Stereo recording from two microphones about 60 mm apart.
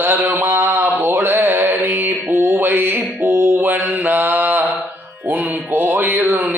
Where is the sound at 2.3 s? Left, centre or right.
Right.